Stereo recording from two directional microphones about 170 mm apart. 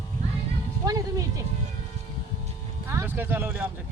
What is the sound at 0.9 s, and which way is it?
Speech, 20° right (ahead or behind).